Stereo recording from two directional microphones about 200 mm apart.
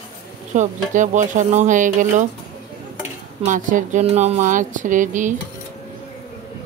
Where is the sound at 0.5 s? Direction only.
40° right (ahead or behind).